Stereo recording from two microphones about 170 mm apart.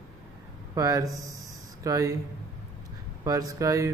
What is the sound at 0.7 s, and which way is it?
Speech, 20° right (ahead or behind).